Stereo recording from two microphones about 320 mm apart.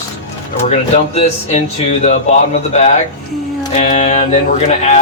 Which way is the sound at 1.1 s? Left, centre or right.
Centre.